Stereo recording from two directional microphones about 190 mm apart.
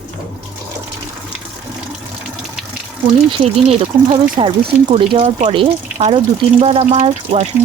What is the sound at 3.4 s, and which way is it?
Speech, 35° right (ahead or behind).